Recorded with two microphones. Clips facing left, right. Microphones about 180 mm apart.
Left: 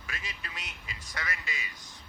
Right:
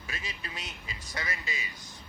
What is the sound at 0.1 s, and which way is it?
A woman's voice, 30° right (ahead or behind).